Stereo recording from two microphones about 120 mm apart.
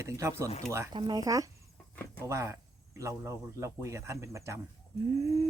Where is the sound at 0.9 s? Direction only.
35° right (ahead or behind).